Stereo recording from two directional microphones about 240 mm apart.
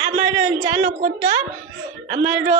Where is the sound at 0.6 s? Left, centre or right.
Right.